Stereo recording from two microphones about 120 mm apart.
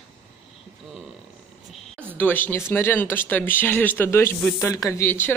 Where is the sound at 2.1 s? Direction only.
15° left (ahead or behind).